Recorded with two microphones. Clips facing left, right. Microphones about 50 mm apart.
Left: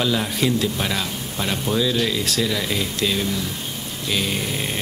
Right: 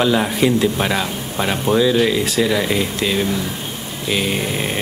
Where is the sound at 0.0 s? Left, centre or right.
Centre.